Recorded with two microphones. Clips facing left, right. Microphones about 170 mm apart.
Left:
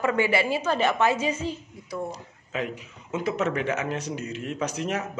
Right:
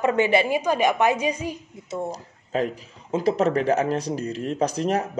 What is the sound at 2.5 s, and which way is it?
A man's voice, 35° right (ahead or behind).